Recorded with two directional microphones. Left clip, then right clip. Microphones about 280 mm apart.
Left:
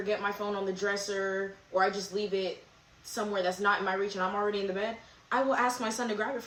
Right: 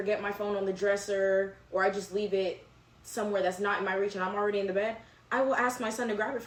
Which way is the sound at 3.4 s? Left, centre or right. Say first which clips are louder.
Left 1 dB; centre.